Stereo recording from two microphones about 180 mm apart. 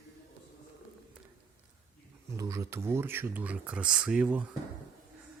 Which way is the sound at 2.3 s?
15° right (ahead or behind).